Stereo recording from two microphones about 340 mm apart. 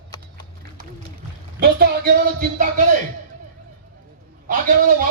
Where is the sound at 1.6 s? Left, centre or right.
Right.